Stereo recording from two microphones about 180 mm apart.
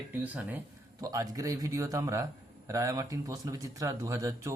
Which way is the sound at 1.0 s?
20° right (ahead or behind).